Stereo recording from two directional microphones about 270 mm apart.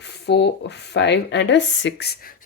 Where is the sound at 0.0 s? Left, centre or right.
Left.